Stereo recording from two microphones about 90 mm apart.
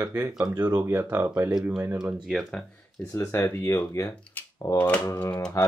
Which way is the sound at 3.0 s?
20° left (ahead or behind).